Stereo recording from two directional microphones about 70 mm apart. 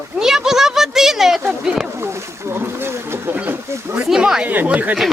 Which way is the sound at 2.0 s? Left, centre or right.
Right.